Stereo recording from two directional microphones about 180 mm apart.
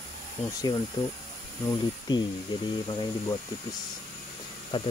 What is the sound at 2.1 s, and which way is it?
Speech, 20° left (ahead or behind).